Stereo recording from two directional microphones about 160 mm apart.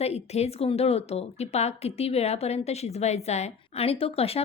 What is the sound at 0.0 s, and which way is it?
Speech, 40° left (ahead or behind).